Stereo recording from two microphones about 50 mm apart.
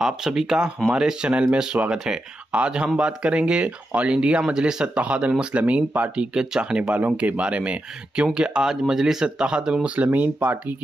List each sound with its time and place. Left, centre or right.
0.0 s speech: centre
4.9 s speech: right
9.8 s speech: right